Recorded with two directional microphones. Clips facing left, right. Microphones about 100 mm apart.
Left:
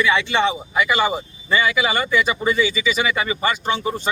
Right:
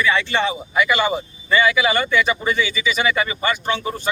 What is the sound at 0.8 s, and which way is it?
Speech, 30° left (ahead or behind).